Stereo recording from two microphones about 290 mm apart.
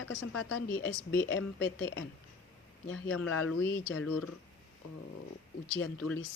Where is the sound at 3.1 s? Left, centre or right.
Left.